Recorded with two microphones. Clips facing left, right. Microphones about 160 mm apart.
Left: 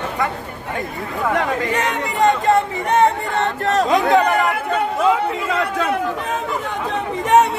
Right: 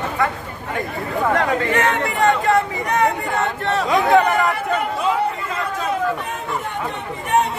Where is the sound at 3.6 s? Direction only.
40° left (ahead or behind).